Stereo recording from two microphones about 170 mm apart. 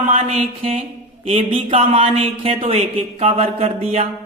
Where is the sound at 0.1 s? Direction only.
35° right (ahead or behind).